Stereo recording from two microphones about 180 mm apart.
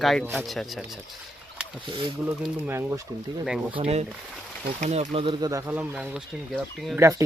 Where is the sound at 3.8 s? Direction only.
35° right (ahead or behind).